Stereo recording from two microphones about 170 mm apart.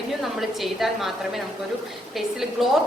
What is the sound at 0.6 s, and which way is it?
Speech, centre (ahead or behind).